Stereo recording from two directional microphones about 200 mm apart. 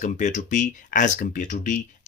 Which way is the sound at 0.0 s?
35° left (ahead or behind).